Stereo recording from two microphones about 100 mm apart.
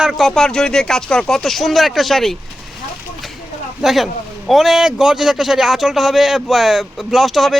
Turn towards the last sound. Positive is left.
turn(degrees=0)  # may be behind; listen again after turning